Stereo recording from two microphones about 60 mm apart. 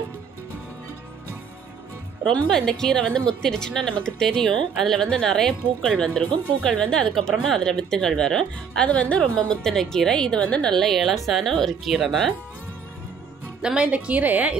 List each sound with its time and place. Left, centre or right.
2.2 s speech: centre
11.9 s speech: centre
13.6 s a woman's voice: centre